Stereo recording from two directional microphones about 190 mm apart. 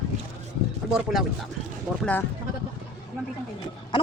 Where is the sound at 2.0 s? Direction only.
10° left (ahead or behind).